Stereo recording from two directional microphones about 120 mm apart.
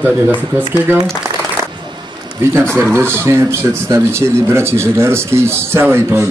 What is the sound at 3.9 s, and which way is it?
Speech, 20° right (ahead or behind).